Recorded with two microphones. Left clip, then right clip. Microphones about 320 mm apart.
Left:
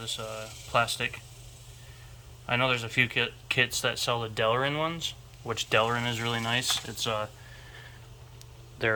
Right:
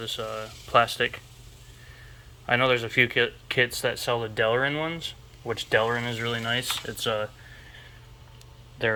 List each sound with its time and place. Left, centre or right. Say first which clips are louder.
0.0 s speech: right 4 dB; centre
2.5 s speech: right 4 dB; centre
8.8 s speech: right 2 dB; centre